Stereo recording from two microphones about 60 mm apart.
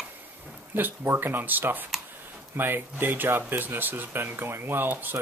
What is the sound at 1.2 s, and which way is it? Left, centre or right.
Speech, right.